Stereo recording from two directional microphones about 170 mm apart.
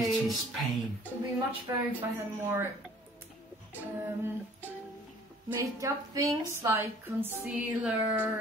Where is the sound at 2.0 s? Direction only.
15° right (ahead or behind).